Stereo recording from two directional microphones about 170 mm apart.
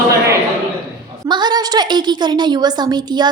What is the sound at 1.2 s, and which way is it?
A woman's voice, 25° right (ahead or behind).